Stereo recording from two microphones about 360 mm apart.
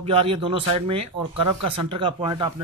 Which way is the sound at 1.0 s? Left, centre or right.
Right.